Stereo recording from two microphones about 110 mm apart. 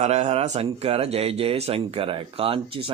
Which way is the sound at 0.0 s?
90° right.